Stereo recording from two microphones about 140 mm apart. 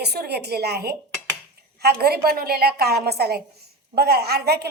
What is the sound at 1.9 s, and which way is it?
Speech, 90° right.